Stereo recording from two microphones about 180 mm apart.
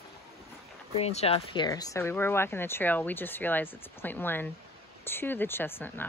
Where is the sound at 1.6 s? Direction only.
20° left (ahead or behind).